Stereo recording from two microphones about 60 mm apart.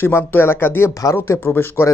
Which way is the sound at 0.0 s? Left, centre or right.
Left.